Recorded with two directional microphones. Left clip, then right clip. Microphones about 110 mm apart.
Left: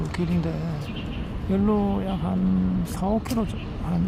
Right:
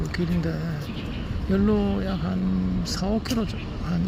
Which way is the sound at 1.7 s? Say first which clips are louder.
Even; 20° right (ahead or behind).